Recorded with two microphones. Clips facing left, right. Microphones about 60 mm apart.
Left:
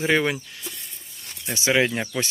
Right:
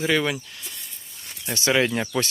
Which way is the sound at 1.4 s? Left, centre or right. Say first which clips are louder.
Even; centre.